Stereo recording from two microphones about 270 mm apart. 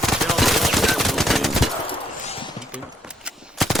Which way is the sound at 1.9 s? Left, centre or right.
Left.